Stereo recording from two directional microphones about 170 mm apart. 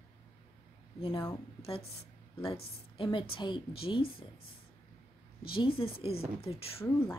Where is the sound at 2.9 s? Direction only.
30° left (ahead or behind).